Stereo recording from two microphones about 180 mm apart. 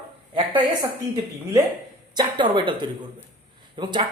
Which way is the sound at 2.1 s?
25° right (ahead or behind).